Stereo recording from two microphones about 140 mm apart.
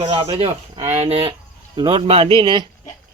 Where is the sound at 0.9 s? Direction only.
50° right (ahead or behind).